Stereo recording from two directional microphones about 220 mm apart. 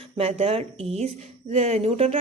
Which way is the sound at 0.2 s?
25° right (ahead or behind).